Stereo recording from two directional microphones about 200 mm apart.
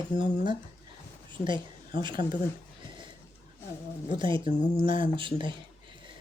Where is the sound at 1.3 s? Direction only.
25° right (ahead or behind).